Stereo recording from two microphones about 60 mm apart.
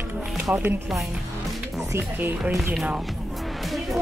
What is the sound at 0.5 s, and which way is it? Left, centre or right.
Speech, right.